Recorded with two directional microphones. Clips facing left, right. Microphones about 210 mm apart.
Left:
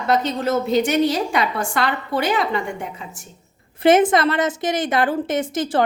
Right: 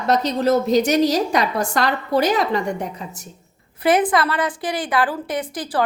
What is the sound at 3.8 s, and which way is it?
A woman's voice, 25° left (ahead or behind).